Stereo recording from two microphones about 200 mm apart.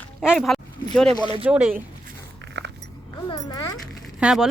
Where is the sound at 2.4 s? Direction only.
60° right (ahead or behind).